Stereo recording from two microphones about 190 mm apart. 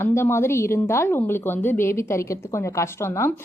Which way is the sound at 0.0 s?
15° left (ahead or behind).